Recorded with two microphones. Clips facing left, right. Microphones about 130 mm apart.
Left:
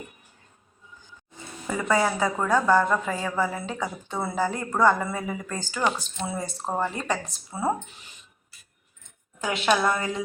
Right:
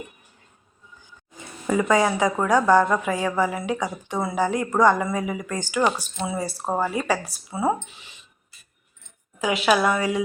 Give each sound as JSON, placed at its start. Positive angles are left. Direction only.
{"t": 1.7, "sound": "a woman's voice", "side_deg": -15}
{"t": 9.4, "sound": "a woman's voice", "side_deg": -5}